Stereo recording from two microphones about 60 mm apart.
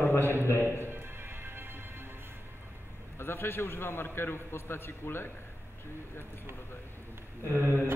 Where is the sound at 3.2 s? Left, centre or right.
Left.